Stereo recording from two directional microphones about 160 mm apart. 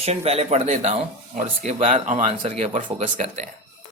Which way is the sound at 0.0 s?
40° right (ahead or behind).